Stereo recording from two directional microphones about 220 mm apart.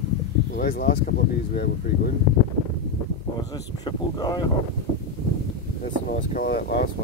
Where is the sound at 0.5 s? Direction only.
40° left (ahead or behind).